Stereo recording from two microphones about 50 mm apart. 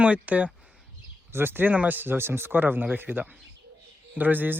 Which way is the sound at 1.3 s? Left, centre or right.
Right.